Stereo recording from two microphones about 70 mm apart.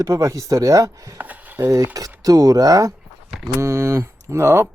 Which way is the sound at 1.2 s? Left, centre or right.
Right.